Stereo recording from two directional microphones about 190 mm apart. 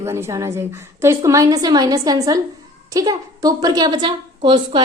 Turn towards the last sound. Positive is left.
turn(degrees=-25)  # may be behind; listen again after turning